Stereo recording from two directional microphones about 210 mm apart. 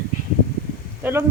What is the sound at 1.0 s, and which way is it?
Speech, 10° right (ahead or behind).